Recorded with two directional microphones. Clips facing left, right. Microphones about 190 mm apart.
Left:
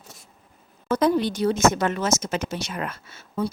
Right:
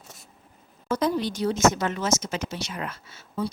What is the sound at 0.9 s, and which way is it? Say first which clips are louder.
Speech: left 4 dB; 55° left (ahead or behind).